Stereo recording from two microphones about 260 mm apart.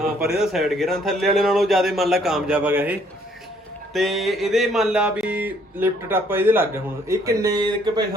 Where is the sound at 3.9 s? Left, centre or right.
Centre.